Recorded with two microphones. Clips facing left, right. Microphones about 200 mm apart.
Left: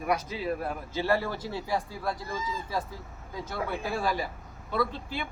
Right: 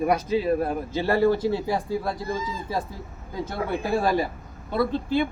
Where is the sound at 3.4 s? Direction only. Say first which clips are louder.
Right 5 dB; 25° right (ahead or behind).